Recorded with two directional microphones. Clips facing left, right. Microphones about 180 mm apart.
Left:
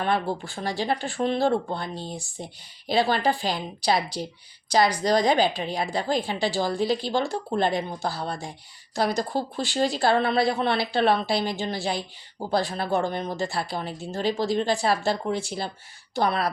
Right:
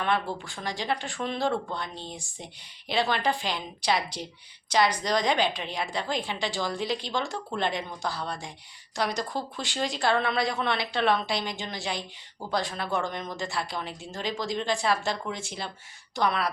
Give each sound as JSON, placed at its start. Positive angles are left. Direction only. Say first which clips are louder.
{"t": 0.0, "sound": "speech", "louder": "left 3 dB", "side_deg": 35}